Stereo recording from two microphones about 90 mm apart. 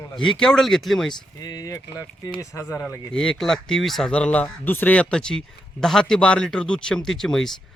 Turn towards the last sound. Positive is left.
turn(degrees=5)  # may be behind; listen again after turning